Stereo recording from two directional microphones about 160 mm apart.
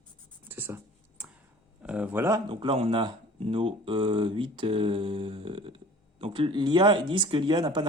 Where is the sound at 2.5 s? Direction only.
35° right (ahead or behind).